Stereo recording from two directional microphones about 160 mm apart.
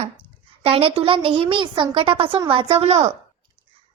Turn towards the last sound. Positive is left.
turn(degrees=-45)  # may be behind; listen again after turning